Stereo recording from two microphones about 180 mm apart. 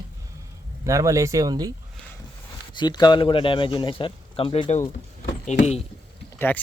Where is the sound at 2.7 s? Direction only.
25° left (ahead or behind).